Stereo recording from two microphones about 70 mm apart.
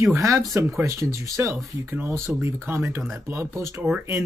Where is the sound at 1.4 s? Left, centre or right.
Right.